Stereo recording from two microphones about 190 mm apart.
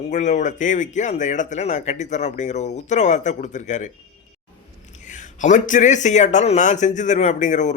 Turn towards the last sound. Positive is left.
turn(degrees=40)  # may be behind; listen again after turning